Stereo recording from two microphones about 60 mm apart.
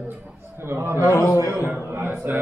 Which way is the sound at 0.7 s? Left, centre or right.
Right.